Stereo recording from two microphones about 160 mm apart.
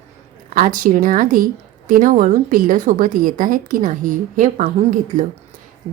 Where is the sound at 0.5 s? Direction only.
55° right (ahead or behind).